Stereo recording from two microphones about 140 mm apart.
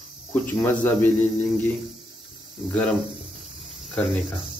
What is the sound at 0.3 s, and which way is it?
A man's voice, 15° left (ahead or behind).